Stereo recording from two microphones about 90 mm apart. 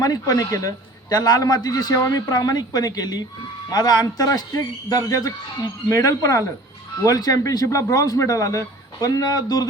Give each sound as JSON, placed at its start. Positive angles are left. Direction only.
{"t": 0.0, "sound": "a man's voice", "side_deg": 45}